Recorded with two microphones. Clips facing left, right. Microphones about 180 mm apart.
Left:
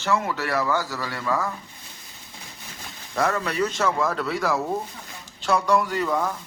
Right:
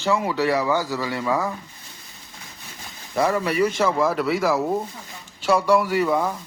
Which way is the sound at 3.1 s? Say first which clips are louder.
Right 3 dB; 10° right (ahead or behind).